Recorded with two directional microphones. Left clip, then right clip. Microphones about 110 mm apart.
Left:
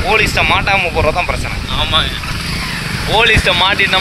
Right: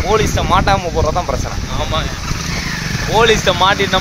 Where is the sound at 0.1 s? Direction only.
30° right (ahead or behind).